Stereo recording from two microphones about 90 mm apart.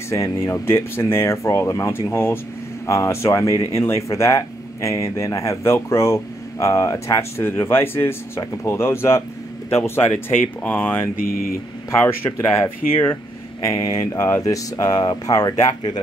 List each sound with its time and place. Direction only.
0.1 s speech: 35° left (ahead or behind)
13.7 s speech: 45° left (ahead or behind)